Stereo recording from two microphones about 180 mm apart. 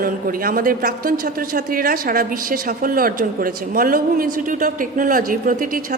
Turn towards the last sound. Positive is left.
turn(degrees=-50)  # may be behind; listen again after turning